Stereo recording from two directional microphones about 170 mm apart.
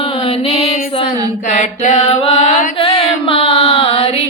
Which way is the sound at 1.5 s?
45° left (ahead or behind).